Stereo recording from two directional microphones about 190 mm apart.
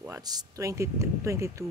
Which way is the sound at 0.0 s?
20° right (ahead or behind).